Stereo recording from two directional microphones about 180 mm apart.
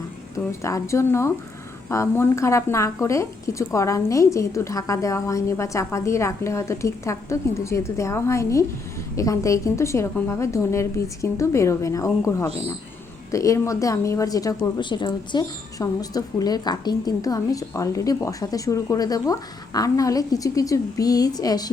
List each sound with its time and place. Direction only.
0.3 s a woman's voice: 15° left (ahead or behind)